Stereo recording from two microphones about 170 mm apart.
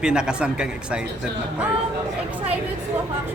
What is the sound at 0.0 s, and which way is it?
Speech, 5° right (ahead or behind).